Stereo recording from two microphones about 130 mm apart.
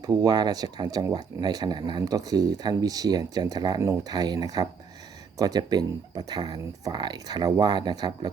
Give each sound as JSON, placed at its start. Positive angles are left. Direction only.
{"t": 0.0, "sound": "speech", "side_deg": -30}